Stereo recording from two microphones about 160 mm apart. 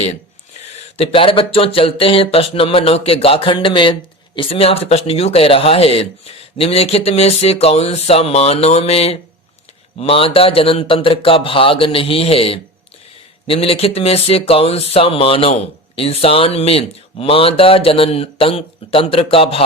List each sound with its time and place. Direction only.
0.8 s speech: 40° left (ahead or behind)